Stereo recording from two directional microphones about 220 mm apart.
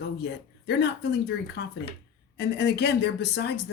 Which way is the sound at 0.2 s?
50° left (ahead or behind).